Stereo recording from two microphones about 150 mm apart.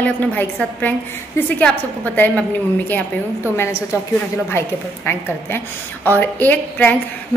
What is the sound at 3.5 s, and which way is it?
A woman's voice, 15° left (ahead or behind).